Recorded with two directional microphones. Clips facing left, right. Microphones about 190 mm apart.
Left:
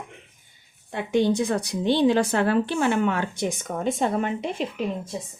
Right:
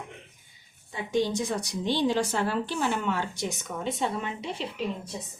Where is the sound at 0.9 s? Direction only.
60° left (ahead or behind).